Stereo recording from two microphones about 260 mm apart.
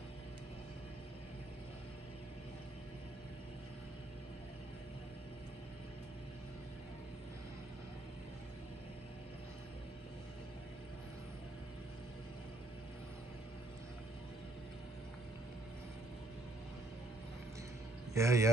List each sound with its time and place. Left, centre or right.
18.1 s a man's voice: centre